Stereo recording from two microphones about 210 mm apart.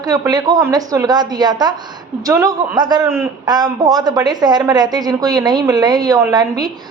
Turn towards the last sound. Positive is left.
turn(degrees=-15)  # may be behind; listen again after turning